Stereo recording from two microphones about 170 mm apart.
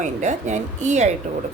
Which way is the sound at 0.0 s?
45° right (ahead or behind).